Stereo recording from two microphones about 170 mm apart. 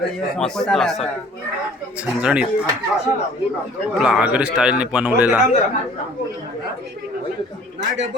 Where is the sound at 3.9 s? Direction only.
5° right (ahead or behind).